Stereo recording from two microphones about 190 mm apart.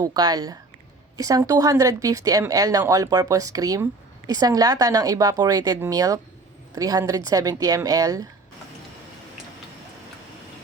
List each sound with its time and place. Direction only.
0.0 s speech: 20° right (ahead or behind)